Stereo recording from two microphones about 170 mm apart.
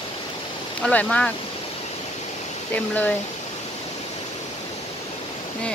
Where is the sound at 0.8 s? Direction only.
5° left (ahead or behind).